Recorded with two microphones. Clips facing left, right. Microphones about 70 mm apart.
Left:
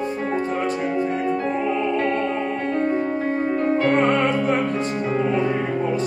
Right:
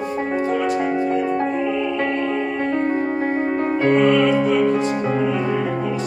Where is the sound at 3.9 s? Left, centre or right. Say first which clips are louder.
Right 3 dB; left.